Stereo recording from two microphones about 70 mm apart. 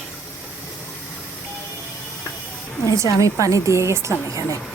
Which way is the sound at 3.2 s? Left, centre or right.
Right.